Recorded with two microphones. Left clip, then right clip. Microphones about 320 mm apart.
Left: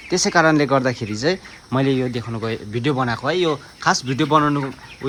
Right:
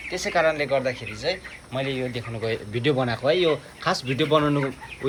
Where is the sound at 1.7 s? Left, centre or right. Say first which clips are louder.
Left 7 dB; left.